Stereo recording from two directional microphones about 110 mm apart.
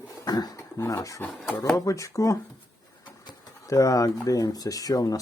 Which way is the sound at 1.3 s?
Centre (ahead or behind).